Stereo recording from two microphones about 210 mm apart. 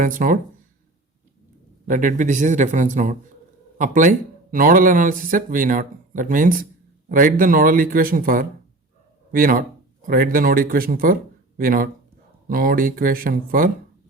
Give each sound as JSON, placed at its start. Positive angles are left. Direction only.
{"t": 0.0, "sound": "speech", "side_deg": -40}
{"t": 1.9, "sound": "speech", "side_deg": -40}